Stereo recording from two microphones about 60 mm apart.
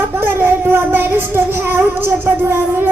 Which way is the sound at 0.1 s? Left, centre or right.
Right.